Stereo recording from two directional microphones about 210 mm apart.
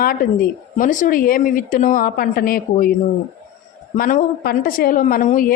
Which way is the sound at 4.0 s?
40° left (ahead or behind).